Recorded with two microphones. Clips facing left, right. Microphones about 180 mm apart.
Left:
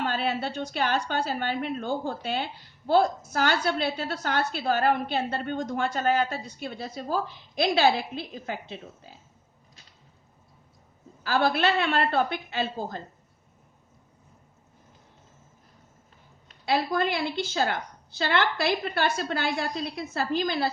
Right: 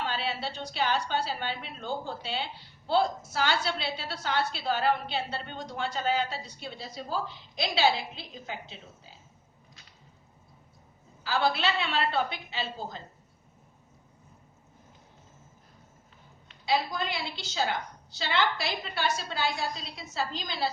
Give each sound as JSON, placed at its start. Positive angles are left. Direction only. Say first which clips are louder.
{"t": 0.0, "sound": "a woman's voice", "louder": "left 5 dB", "side_deg": 50}
{"t": 11.2, "sound": "a woman's voice", "louder": "left 4 dB", "side_deg": 55}
{"t": 16.5, "sound": "a woman's voice", "louder": "left 3 dB", "side_deg": 55}